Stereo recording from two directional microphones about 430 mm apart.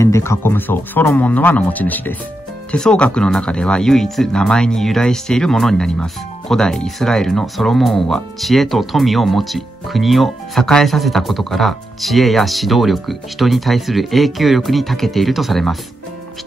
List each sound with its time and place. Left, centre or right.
0.0 s speech: centre